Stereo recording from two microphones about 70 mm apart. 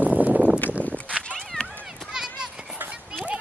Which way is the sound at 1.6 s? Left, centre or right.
Centre.